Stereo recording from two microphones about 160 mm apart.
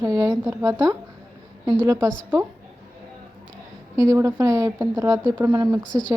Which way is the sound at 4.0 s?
20° right (ahead or behind).